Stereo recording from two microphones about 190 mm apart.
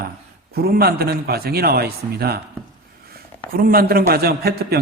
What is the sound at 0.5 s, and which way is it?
A man's voice, 55° right (ahead or behind).